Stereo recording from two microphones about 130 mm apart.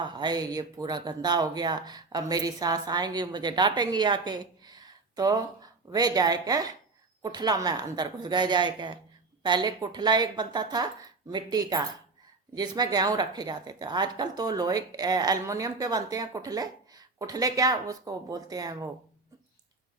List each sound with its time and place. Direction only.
0.0 s speech: 35° right (ahead or behind)